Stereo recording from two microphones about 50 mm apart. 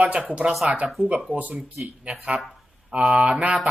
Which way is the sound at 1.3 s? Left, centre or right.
Right.